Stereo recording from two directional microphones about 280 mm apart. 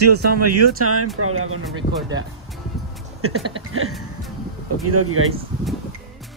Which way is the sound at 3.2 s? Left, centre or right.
Right.